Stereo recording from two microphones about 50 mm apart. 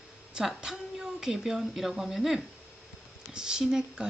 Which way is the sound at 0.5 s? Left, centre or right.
Centre.